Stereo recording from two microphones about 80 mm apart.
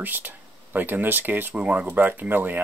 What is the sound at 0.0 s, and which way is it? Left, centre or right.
Speech, right.